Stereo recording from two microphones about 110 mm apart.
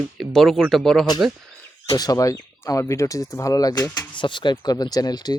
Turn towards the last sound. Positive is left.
turn(degrees=40)  # may be behind; listen again after turning